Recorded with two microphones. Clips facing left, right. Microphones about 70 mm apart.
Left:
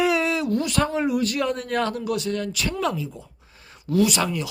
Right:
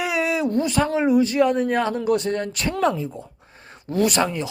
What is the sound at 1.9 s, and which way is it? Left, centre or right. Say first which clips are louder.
Speech: right 4 dB; right.